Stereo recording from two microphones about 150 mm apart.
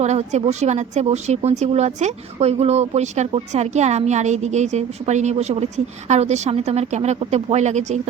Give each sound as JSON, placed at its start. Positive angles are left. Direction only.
{"t": 0.0, "sound": "speech", "side_deg": -50}